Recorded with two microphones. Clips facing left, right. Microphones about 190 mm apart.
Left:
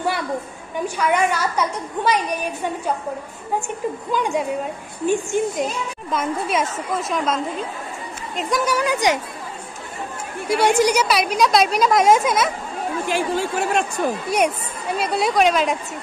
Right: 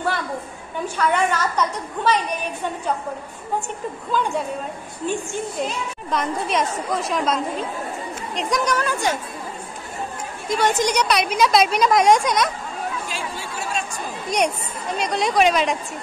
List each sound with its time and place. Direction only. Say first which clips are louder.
0.8 s a woman's voice: left 1 dB; 10° left (ahead or behind)
4.1 s a woman's voice: left 1 dB; 15° left (ahead or behind)
6.0 s a woman's voice: even; 5° left (ahead or behind)
8.4 s a woman's voice: left 1 dB; centre (ahead or behind)
10.5 s a woman's voice: left 3 dB; 10° left (ahead or behind)
13.1 s speech: left 9 dB; 55° left (ahead or behind)
14.3 s a woman's voice: left 2 dB; 5° left (ahead or behind)